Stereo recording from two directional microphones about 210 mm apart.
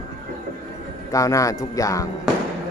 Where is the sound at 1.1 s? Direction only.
15° left (ahead or behind).